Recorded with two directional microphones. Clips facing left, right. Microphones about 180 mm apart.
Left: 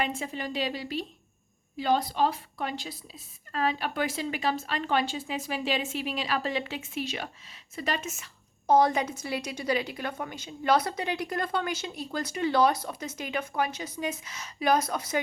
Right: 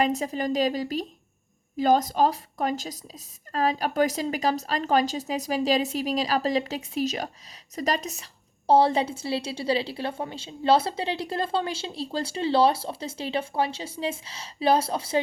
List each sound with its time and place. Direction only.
0.0 s a woman's voice: 40° right (ahead or behind)